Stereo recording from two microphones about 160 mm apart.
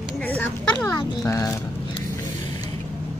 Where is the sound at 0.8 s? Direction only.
20° left (ahead or behind).